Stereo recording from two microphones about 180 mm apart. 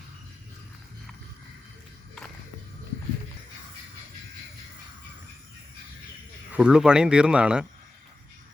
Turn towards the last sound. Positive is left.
turn(degrees=-5)  # may be behind; listen again after turning